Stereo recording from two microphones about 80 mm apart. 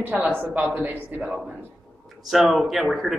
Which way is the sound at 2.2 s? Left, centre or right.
Centre.